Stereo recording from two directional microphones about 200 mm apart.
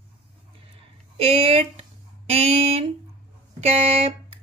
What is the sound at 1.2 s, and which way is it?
Speech, 30° right (ahead or behind).